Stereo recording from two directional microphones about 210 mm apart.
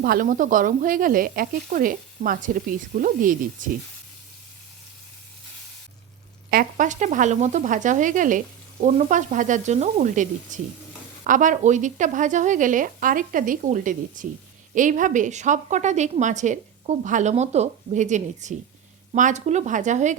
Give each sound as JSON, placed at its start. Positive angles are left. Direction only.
{"t": 0.0, "sound": "a woman's voice", "side_deg": -40}
{"t": 6.5, "sound": "a woman's voice", "side_deg": -40}